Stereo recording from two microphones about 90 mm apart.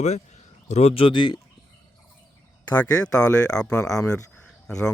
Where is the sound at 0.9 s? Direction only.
70° left (ahead or behind).